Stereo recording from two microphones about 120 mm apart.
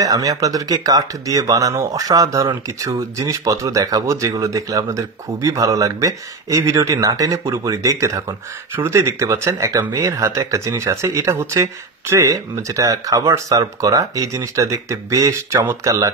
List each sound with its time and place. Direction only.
0.0 s speech: 30° right (ahead or behind)